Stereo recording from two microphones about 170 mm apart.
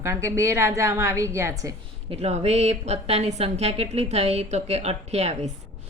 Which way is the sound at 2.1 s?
40° right (ahead or behind).